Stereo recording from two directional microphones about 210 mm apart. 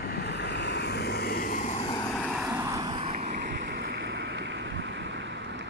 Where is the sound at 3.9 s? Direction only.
55° right (ahead or behind).